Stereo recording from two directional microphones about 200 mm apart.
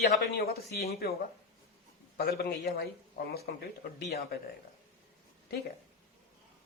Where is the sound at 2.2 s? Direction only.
50° left (ahead or behind).